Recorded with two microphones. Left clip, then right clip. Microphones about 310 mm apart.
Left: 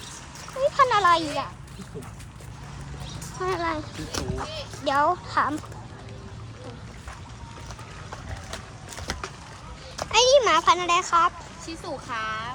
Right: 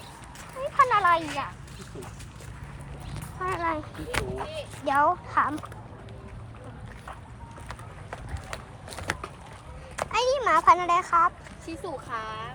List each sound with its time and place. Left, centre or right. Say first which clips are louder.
0.6 s a child's voice: left 2 dB; centre
3.4 s speech: left 1 dB; centre
4.1 s a child's voice: right 2 dB; right
4.8 s speech: left 1 dB; centre
10.1 s a child's voice: left 6 dB; centre
12.1 s speech: left 7 dB; left